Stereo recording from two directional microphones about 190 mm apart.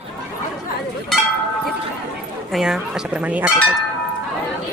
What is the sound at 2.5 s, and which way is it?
Speech, centre (ahead or behind).